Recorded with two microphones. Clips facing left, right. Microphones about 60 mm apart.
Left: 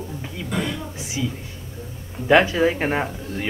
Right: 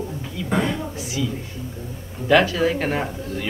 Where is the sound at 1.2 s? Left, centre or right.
Left.